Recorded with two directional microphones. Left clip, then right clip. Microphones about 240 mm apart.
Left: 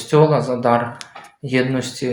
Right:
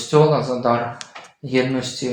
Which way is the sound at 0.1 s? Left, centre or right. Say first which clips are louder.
Left 1 dB; left.